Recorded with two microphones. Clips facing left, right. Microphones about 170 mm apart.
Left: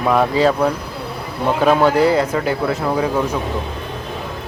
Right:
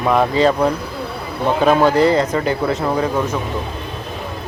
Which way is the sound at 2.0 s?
10° left (ahead or behind).